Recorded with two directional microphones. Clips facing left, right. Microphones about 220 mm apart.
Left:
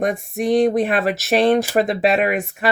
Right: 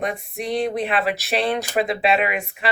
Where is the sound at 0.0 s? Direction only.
45° left (ahead or behind).